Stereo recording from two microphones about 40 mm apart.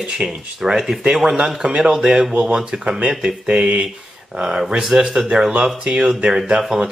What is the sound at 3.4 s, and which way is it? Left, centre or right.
Speech, right.